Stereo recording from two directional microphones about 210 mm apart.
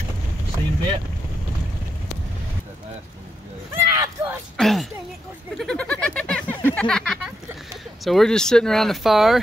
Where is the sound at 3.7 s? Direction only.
10° right (ahead or behind).